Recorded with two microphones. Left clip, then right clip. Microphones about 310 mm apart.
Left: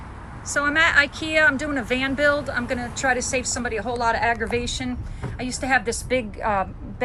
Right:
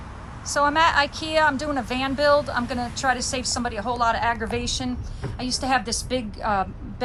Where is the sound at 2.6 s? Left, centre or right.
Right.